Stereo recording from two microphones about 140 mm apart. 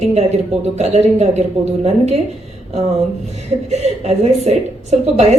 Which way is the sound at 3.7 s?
55° right (ahead or behind).